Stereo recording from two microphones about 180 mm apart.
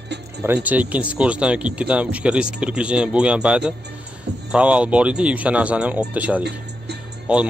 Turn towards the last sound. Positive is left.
turn(degrees=-5)  # may be behind; listen again after turning